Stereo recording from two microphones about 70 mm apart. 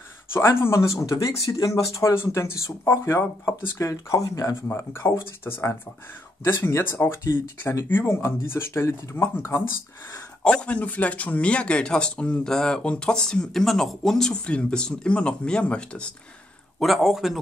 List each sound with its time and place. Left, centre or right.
0.3 s speech: left
3.9 s speech: left
4.7 s speech: left
10.4 s speech: centre
16.8 s a man's voice: centre